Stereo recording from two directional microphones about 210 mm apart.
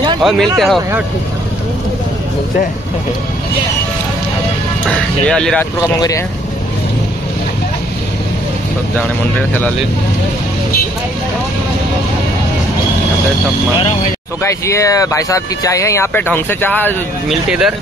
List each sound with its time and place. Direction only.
0.2 s speech: centre (ahead or behind)
5.2 s speech: 5° left (ahead or behind)
5.9 s speech: 15° left (ahead or behind)
14.4 s speech: 15° left (ahead or behind)
17.5 s speech: 5° right (ahead or behind)